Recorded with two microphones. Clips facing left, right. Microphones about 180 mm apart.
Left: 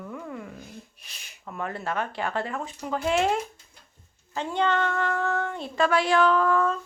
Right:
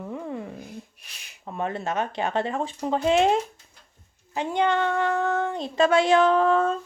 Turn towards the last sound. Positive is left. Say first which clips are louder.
# right 2 dB
turn(degrees=-25)  # may be behind; listen again after turning